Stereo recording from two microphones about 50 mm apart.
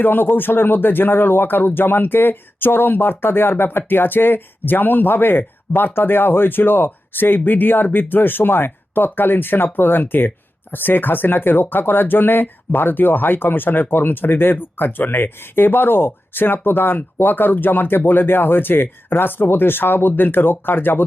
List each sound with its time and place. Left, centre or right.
0.0 s speech: left